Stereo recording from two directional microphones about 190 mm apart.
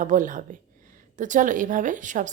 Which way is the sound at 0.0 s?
45° right (ahead or behind).